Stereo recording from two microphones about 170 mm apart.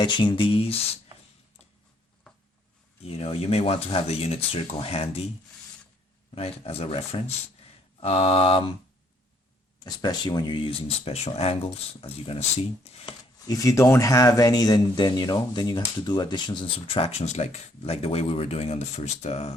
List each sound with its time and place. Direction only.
0.0 s speech: 25° left (ahead or behind)
3.0 s speech: 35° left (ahead or behind)
6.3 s speech: 35° left (ahead or behind)
9.8 s speech: 25° left (ahead or behind)
13.5 s speech: 20° left (ahead or behind); by 19.5 s 40° left (ahead or behind)